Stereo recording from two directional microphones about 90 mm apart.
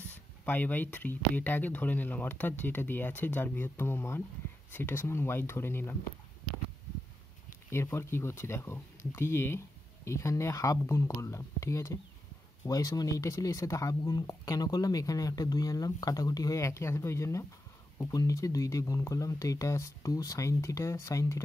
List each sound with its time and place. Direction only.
0.1 s speech: 20° left (ahead or behind)
7.7 s speech: 30° left (ahead or behind)